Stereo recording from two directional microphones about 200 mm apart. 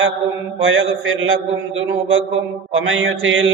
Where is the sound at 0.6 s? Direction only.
85° right.